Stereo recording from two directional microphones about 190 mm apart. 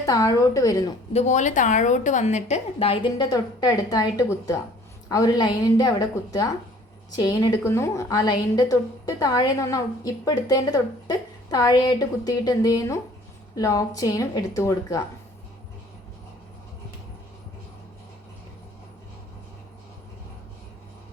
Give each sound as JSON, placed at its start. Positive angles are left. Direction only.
{"t": 0.0, "sound": "a woman's voice", "side_deg": 20}
{"t": 1.1, "sound": "a woman's voice", "side_deg": 40}